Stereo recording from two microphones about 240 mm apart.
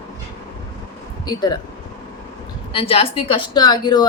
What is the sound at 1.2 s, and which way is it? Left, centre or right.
Speech, centre.